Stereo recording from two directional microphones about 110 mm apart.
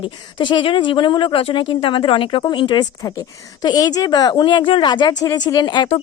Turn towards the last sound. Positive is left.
turn(degrees=40)  # may be behind; listen again after turning